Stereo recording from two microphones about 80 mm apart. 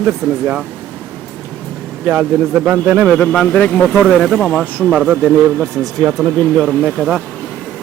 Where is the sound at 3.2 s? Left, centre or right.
Centre.